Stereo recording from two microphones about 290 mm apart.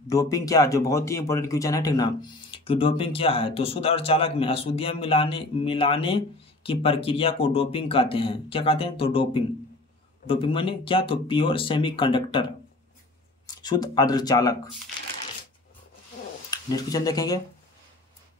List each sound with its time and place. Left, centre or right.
0.1 s speech: centre
13.5 s speech: centre
16.4 s speech: centre